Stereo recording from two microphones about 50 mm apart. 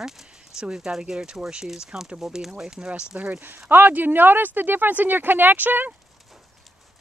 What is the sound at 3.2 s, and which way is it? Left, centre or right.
Speech, right.